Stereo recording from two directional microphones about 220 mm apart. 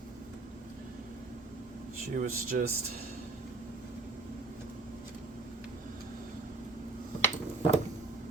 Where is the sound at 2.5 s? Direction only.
45° right (ahead or behind).